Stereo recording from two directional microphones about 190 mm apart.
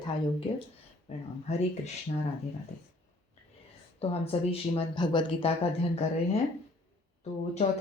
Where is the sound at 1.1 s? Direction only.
35° left (ahead or behind).